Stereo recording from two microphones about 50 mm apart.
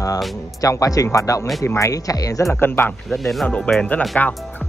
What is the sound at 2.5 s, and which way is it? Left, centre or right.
Speech, left.